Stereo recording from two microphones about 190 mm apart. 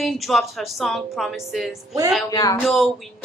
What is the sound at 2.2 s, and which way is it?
Speech, 20° left (ahead or behind).